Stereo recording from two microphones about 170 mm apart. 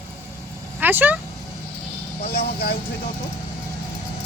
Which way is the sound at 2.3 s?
65° left (ahead or behind).